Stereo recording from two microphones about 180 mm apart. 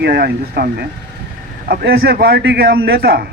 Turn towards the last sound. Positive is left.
turn(degrees=-60)  # may be behind; listen again after turning